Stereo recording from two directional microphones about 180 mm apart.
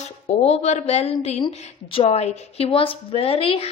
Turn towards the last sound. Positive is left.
turn(degrees=30)  # may be behind; listen again after turning